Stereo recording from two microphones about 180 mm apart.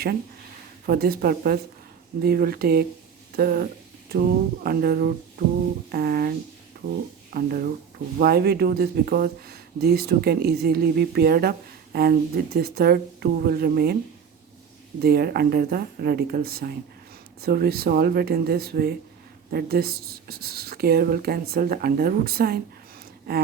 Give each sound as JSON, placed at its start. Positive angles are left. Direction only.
{"t": 0.9, "sound": "speech", "side_deg": -55}
{"t": 7.3, "sound": "speech", "side_deg": -55}
{"t": 15.0, "sound": "speech", "side_deg": -60}